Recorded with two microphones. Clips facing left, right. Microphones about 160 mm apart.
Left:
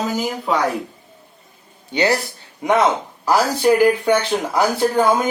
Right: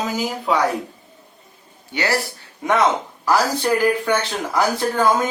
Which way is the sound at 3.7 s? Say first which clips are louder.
Left 6 dB; 15° left (ahead or behind).